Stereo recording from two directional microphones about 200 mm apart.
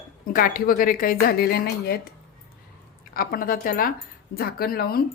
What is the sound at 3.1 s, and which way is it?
Speech, 45° left (ahead or behind).